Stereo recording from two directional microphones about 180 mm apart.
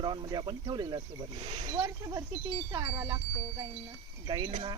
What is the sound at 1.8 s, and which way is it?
Wind chime, 20° right (ahead or behind).